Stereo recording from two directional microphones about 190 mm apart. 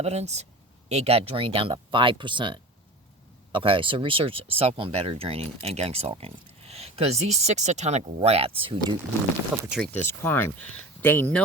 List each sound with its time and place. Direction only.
0.0 s speech: 35° right (ahead or behind)
9.5 s speech: 5° right (ahead or behind)
10.0 s speech: 10° left (ahead or behind)